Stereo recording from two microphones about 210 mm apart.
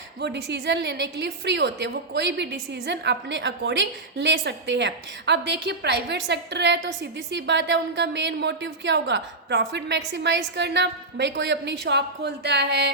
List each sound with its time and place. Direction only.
0.2 s a woman's voice: 50° right (ahead or behind)